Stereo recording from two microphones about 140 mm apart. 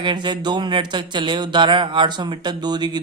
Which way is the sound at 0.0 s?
35° right (ahead or behind).